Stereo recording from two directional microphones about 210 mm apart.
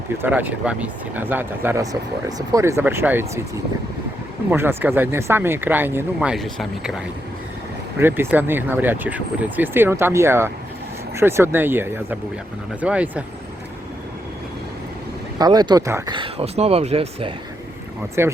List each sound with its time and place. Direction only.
0.2 s speech: 10° right (ahead or behind)
4.5 s speech: 10° right (ahead or behind)
15.4 s speech: 20° right (ahead or behind)
18.2 s speech: 10° right (ahead or behind)